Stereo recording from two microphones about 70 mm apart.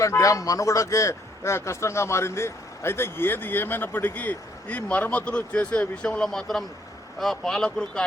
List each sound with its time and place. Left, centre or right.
0.0 s a man's voice: left; by 8.0 s centre